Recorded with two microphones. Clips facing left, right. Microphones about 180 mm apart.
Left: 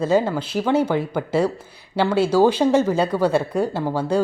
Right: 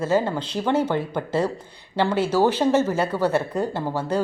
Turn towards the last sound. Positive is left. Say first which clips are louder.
# left 3 dB
turn(degrees=10)  # may be behind; listen again after turning